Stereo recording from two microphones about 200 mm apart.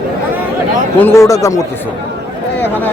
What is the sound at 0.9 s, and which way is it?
Speech, 10° left (ahead or behind).